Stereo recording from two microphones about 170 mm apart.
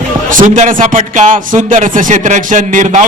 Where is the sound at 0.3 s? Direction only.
50° right (ahead or behind).